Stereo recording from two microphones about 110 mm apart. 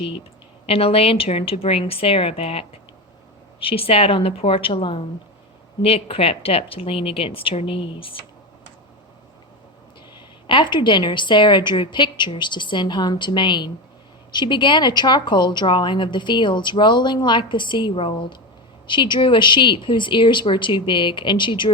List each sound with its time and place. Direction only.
0.7 s a woman's voice: 60° left (ahead or behind)
5.8 s a woman's voice: 60° left (ahead or behind)
10.4 s a woman's voice: 50° left (ahead or behind)